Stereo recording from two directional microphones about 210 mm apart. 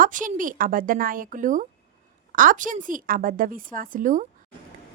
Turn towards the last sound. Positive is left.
turn(degrees=-40)  # may be behind; listen again after turning